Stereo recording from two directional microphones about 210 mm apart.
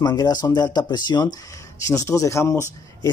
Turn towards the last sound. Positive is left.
turn(degrees=15)  # may be behind; listen again after turning